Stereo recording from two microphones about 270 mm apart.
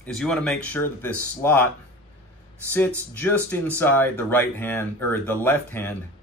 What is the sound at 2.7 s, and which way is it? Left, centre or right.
Speech, centre.